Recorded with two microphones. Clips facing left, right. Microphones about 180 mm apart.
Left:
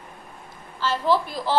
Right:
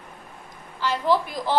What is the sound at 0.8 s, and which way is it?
Speech, 15° right (ahead or behind).